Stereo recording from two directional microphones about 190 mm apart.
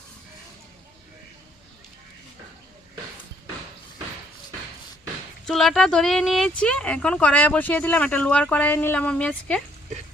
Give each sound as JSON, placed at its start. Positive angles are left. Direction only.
{"t": 5.5, "sound": "speech", "side_deg": 0}